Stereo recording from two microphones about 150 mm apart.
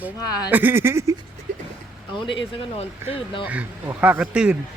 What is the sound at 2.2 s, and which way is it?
Speech, 35° left (ahead or behind).